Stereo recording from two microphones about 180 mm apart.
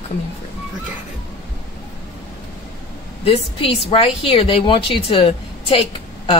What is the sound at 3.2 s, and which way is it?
A woman's voice, 30° left (ahead or behind).